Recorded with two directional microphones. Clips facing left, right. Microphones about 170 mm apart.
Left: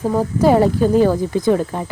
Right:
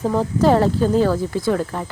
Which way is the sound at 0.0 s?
10° left (ahead or behind).